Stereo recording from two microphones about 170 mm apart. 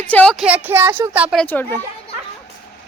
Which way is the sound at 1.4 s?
10° left (ahead or behind).